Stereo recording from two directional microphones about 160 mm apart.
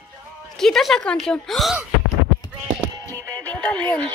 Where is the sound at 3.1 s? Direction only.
10° left (ahead or behind).